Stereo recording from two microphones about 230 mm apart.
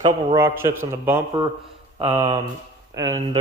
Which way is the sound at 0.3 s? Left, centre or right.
Centre.